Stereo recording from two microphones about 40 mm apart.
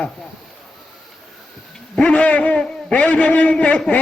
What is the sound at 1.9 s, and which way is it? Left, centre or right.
A man's voice, left.